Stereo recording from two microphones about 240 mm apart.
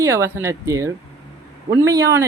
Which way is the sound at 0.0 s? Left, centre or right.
Centre.